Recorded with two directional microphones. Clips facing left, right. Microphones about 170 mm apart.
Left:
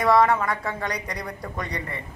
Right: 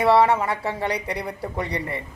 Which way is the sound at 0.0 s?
30° right (ahead or behind).